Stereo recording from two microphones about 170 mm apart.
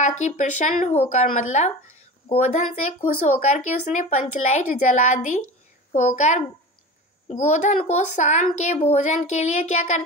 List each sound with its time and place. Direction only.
0.2 s a woman's voice: 45° left (ahead or behind)